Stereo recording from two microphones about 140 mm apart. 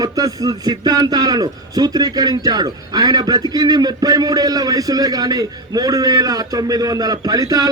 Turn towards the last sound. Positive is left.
turn(degrees=-25)  # may be behind; listen again after turning